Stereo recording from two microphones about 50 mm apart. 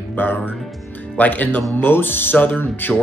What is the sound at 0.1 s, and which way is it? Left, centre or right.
Speech, left.